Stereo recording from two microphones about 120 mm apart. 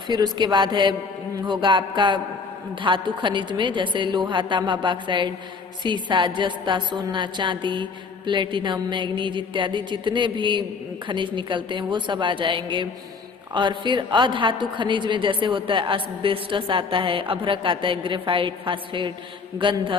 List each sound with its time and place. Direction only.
0.1 s a woman's voice: 40° right (ahead or behind)